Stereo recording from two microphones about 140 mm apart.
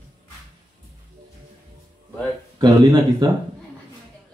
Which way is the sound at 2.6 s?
30° right (ahead or behind).